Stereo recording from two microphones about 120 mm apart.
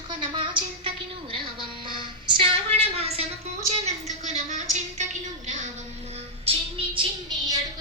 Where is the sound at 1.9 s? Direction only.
45° right (ahead or behind).